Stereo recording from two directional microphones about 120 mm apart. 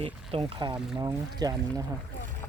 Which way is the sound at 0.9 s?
35° right (ahead or behind).